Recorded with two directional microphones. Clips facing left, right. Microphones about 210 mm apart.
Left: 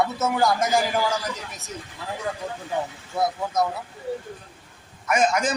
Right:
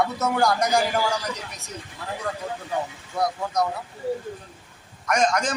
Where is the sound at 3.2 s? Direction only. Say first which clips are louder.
Left 1 dB; 5° left (ahead or behind).